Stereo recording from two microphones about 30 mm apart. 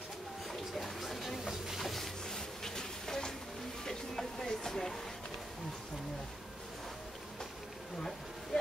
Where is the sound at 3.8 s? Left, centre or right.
Centre.